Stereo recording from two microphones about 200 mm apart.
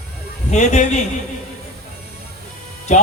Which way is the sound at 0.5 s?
35° left (ahead or behind).